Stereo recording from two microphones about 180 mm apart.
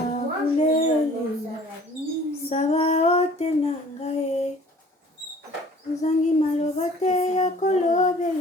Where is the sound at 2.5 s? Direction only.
40° left (ahead or behind).